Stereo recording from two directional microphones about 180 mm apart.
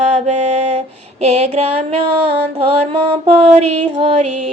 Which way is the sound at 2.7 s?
30° right (ahead or behind).